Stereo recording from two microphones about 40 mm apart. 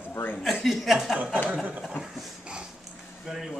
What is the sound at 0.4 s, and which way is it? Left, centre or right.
Speech, centre.